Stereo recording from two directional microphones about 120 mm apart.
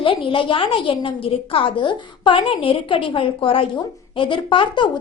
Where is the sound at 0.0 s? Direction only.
45° left (ahead or behind).